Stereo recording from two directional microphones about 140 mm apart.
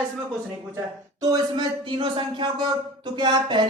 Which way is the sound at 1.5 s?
35° right (ahead or behind).